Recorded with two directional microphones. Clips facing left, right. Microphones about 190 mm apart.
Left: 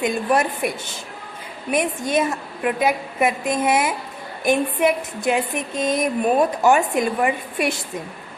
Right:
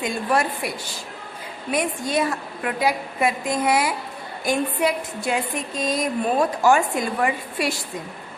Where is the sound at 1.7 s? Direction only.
20° left (ahead or behind).